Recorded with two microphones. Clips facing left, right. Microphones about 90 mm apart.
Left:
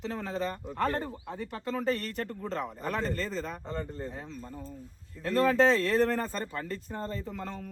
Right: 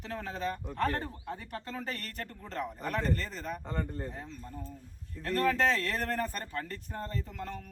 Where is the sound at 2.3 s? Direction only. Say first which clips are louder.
Left 3 dB; 30° left (ahead or behind).